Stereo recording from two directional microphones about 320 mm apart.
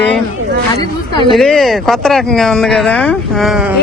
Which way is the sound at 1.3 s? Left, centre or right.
Centre.